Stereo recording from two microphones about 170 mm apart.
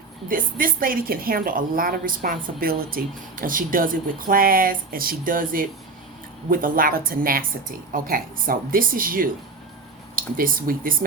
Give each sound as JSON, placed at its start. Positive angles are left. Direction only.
{"t": 0.3, "sound": "a woman's voice", "side_deg": -55}